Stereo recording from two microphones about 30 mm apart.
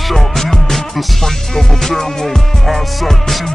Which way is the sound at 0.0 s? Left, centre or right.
Centre.